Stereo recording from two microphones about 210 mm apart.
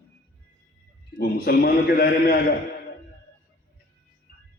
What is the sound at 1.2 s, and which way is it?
A man's voice, 45° left (ahead or behind).